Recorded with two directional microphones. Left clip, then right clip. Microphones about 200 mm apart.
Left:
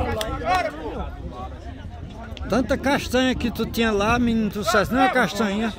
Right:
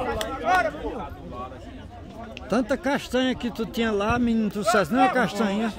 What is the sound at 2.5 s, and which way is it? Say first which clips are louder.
Speech: left 3 dB; 15° left (ahead or behind).